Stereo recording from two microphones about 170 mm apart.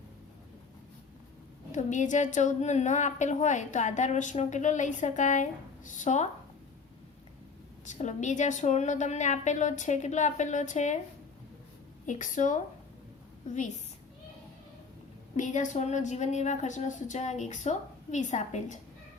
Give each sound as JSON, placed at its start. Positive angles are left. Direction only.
{"t": 1.7, "sound": "a woman's voice", "side_deg": 45}
{"t": 7.9, "sound": "a woman's voice", "side_deg": 45}
{"t": 12.0, "sound": "a woman's voice", "side_deg": 45}
{"t": 15.4, "sound": "a woman's voice", "side_deg": 45}